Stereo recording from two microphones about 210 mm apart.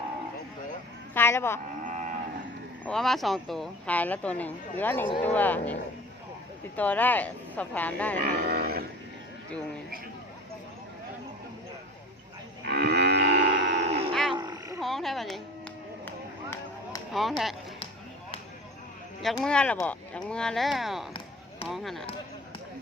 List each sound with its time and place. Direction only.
1.1 s a sound: 10° left (ahead or behind)
1.8 s cattle: 35° right (ahead or behind)
2.8 s speech: centre (ahead or behind)
6.7 s speech: 10° left (ahead or behind)
8.2 s cattle: 45° right (ahead or behind)
12.6 s livestock: 55° right (ahead or behind)
14.3 s roaring cats: 20° right (ahead or behind)
14.8 s speech: centre (ahead or behind)
16.0 s chop: 10° left (ahead or behind)
17.1 s speech: centre (ahead or behind)
19.2 s speech: centre (ahead or behind)